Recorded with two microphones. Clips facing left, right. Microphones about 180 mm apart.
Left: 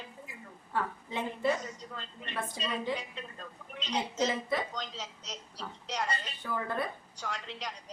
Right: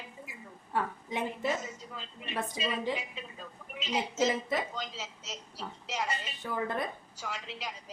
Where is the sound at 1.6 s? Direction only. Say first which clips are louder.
Even; 5° right (ahead or behind).